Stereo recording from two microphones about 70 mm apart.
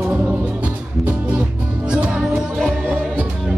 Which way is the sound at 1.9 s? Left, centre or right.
Centre.